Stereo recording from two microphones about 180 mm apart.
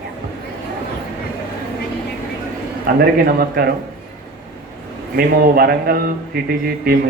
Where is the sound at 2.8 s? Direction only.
55° right (ahead or behind).